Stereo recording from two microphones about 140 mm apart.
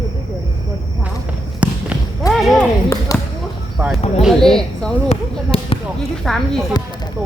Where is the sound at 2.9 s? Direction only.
25° left (ahead or behind).